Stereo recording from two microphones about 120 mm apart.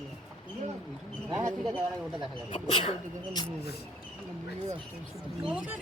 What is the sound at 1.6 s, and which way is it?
Speech, 5° right (ahead or behind).